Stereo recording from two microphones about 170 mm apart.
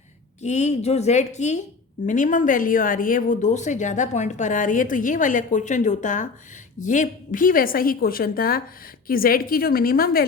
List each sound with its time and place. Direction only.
0.4 s a woman's voice: 45° left (ahead or behind); by 10.2 s 60° left (ahead or behind)